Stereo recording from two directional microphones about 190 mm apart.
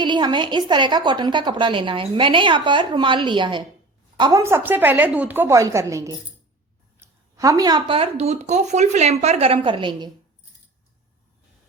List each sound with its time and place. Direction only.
0.0 s a woman's voice: 25° right (ahead or behind)